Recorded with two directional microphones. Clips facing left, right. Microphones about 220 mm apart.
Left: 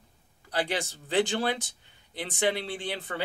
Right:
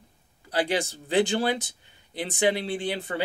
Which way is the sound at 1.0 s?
10° right (ahead or behind).